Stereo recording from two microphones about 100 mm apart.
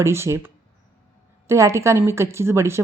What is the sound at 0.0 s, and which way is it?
Speech, 25° right (ahead or behind).